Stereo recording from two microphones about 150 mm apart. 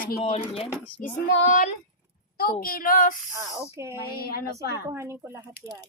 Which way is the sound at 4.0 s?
90° left.